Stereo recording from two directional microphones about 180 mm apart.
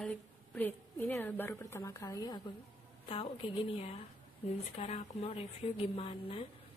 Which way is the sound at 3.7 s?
35° left (ahead or behind).